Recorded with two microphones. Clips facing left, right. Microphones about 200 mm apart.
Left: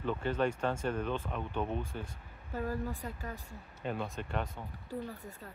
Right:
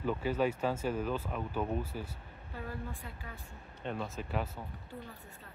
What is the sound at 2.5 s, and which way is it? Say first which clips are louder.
Speech: left 6 dB; 40° left (ahead or behind).